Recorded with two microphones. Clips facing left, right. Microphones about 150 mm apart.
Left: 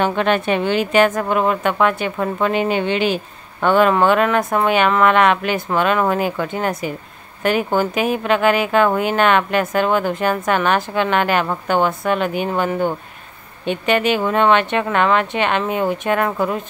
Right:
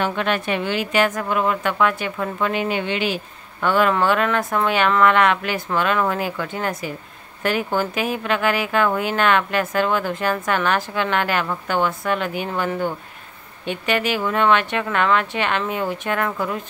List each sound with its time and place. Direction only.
0.2 s a woman's voice: 30° left (ahead or behind)
16.3 s speech: 30° left (ahead or behind)